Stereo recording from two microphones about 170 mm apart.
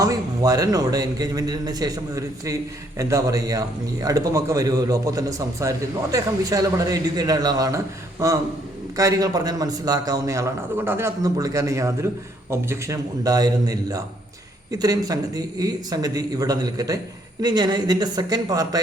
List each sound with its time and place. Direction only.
0.0 s a man's voice: 20° right (ahead or behind)